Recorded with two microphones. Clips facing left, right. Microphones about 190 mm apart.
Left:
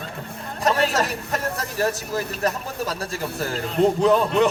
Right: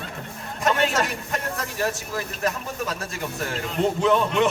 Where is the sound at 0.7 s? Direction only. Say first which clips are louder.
Left 1 dB; 35° left (ahead or behind).